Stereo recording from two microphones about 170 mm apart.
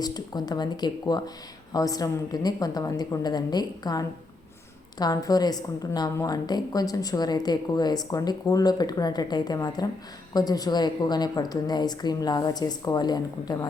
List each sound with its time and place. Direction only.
0.0 s a woman's voice: 25° left (ahead or behind)